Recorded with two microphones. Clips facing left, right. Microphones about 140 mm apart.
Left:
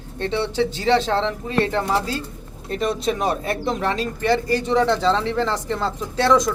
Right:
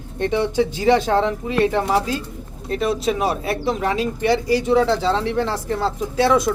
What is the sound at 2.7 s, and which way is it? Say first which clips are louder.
Speech: right 2 dB; 5° right (ahead or behind).